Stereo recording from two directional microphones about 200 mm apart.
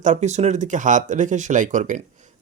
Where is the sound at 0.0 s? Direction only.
35° right (ahead or behind).